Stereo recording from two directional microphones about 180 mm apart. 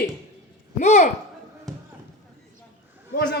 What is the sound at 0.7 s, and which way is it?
Speech, 40° left (ahead or behind).